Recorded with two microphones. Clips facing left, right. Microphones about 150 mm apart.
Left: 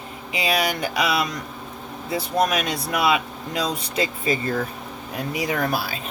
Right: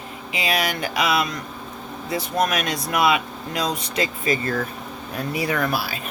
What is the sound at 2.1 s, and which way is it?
Speech, 30° left (ahead or behind).